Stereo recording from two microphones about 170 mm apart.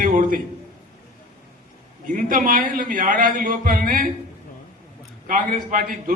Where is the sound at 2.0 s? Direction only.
50° right (ahead or behind).